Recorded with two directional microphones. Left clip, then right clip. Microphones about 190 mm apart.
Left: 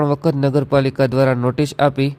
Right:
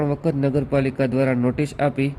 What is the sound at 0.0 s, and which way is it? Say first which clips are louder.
A man's voice: left 5 dB; 30° left (ahead or behind).